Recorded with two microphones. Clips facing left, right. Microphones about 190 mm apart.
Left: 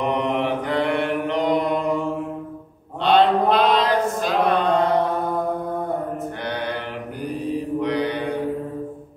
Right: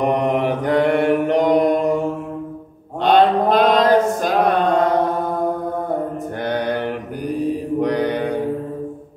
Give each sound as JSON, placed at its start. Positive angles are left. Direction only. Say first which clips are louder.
{"t": 0.0, "sound": "mantra", "louder": "right 4 dB", "side_deg": -45}
{"t": 3.0, "sound": "a sound", "louder": "right 2 dB", "side_deg": -45}
{"t": 6.4, "sound": "mantra", "louder": "right 8 dB", "side_deg": -45}
{"t": 7.8, "sound": "mantra", "louder": "right 6 dB", "side_deg": -45}